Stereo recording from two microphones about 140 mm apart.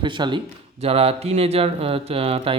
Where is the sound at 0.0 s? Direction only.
35° right (ahead or behind).